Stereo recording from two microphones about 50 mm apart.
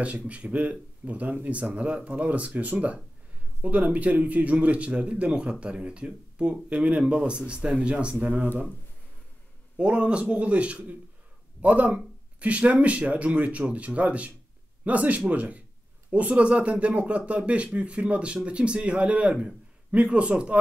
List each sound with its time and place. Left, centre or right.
0.3 s speech: right
9.8 s a man's voice: right